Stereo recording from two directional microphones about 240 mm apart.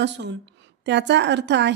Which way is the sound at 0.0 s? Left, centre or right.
Right.